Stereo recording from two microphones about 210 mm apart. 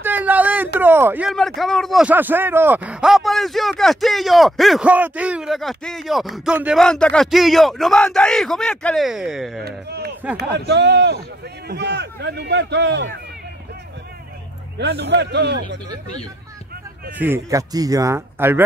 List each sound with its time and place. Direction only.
0.0 s a sound: 10° right (ahead or behind)
0.7 s a man's voice: 10° right (ahead or behind)
1.3 s speech: centre (ahead or behind)
9.7 s speech: 50° right (ahead or behind)
14.8 s speech: 55° right (ahead or behind)
17.2 s a man's voice: 15° right (ahead or behind)